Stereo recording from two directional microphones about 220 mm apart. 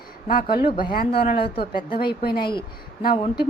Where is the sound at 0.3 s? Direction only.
40° left (ahead or behind).